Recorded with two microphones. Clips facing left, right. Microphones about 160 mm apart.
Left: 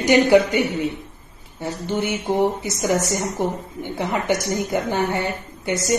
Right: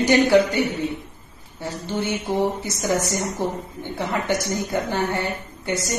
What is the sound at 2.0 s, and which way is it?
A woman's voice, 15° left (ahead or behind).